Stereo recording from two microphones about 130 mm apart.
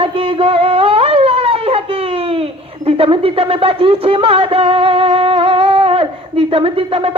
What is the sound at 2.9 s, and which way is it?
Speech, 45° right (ahead or behind).